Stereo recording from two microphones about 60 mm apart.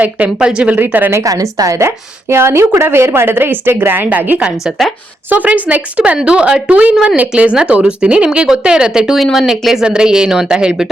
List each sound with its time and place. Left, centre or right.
0.3 s speech: centre
0.8 s a woman's voice: right
1.2 s a woman's voice: right
2.3 s a woman's voice: right
4.4 s speech: centre
5.3 s speech: right; by 9.2 s centre
9.2 s speech: centre
9.5 s speech: centre